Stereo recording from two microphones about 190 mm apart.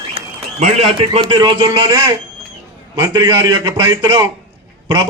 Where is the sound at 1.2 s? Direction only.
25° right (ahead or behind).